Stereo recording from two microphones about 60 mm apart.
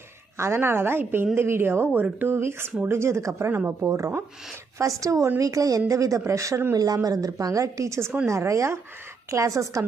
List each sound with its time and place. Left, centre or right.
0.3 s a woman's voice: right
3.8 s a woman's voice: right
5.9 s a woman's voice: right
6.7 s a woman's voice: right